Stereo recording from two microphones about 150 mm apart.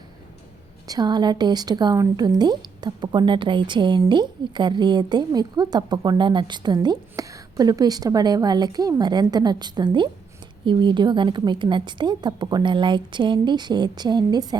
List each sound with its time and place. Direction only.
0.9 s a woman's voice: 30° right (ahead or behind)